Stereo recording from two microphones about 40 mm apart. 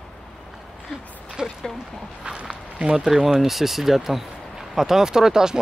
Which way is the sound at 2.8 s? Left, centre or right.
Right.